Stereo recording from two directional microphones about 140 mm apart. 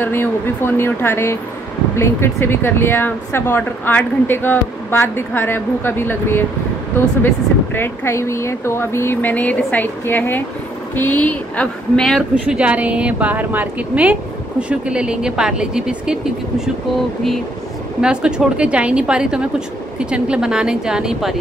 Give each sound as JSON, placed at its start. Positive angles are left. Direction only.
{"t": 0.0, "sound": "a woman's voice", "side_deg": 15}
{"t": 18.0, "sound": "a woman's voice", "side_deg": -5}